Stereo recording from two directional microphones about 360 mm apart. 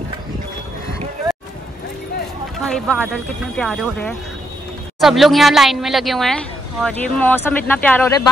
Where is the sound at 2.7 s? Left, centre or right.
Centre.